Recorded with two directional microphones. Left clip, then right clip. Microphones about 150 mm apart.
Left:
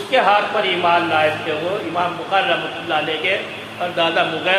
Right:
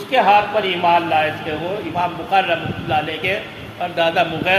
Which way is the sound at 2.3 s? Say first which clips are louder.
Right 1 dB; 60° right (ahead or behind).